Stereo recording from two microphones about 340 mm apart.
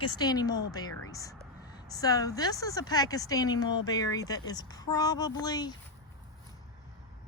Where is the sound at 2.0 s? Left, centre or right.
Centre.